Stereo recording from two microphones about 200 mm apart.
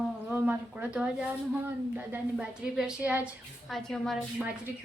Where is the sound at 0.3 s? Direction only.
5° right (ahead or behind).